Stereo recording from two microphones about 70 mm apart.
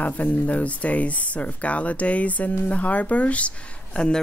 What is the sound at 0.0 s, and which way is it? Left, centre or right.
Speech, left.